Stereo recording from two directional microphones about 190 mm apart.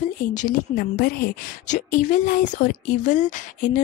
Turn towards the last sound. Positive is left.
turn(degrees=40)  # may be behind; listen again after turning